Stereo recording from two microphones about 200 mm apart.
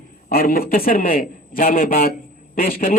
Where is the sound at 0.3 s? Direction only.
45° left (ahead or behind).